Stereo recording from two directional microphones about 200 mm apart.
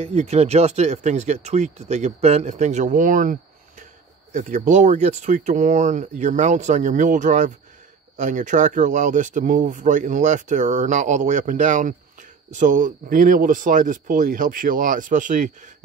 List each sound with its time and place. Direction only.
0.0 s speech: 30° right (ahead or behind)